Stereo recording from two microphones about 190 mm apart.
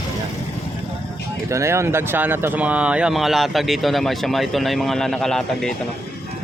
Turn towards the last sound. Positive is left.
turn(degrees=5)  # may be behind; listen again after turning